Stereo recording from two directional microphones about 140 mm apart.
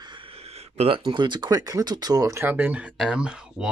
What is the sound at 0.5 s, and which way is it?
Speech, 45° right (ahead or behind).